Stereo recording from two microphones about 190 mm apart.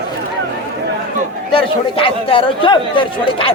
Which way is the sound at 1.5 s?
30° left (ahead or behind).